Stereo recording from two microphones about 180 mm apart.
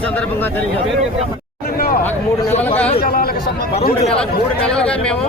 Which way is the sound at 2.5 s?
35° left (ahead or behind).